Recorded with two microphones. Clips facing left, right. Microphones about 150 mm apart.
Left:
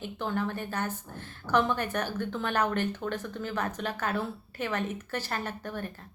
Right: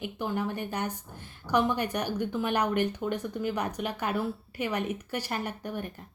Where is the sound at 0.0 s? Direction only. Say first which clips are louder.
Even; 15° right (ahead or behind).